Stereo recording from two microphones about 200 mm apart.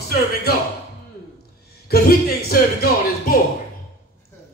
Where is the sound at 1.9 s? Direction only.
50° left (ahead or behind).